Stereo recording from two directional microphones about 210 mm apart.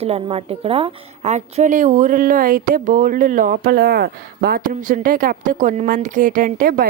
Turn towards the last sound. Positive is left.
turn(degrees=-40)  # may be behind; listen again after turning